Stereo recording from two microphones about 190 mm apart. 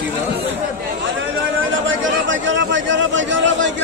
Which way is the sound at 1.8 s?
80° right.